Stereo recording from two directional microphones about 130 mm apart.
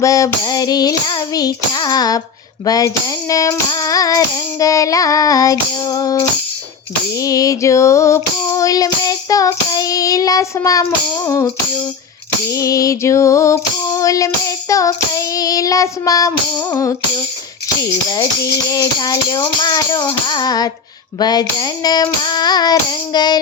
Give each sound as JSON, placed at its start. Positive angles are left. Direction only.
{"t": 0.0, "sound": "speech", "side_deg": 25}
{"t": 2.6, "sound": "child singing", "side_deg": 25}
{"t": 12.5, "sound": "child singing", "side_deg": 25}
{"t": 18.1, "sound": "speech", "side_deg": 30}